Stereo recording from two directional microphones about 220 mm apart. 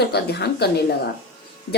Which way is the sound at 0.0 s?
45° left (ahead or behind).